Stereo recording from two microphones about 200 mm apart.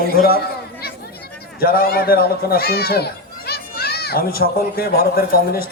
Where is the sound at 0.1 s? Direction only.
50° left (ahead or behind).